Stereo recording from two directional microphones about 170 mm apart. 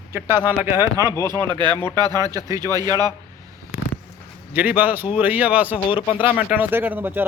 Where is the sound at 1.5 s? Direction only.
25° right (ahead or behind).